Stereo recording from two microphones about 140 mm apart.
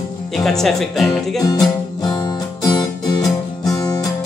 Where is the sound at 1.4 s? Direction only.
25° left (ahead or behind).